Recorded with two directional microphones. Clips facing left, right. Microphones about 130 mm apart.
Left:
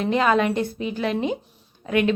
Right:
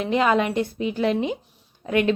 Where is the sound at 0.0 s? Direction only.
20° right (ahead or behind).